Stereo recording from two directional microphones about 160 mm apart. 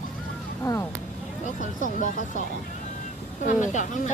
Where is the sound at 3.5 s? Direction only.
50° left (ahead or behind).